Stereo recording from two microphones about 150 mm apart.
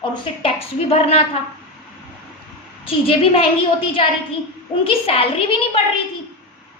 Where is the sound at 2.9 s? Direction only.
40° left (ahead or behind).